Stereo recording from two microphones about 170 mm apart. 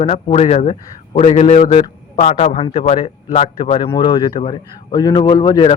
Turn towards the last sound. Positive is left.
turn(degrees=25)  # may be behind; listen again after turning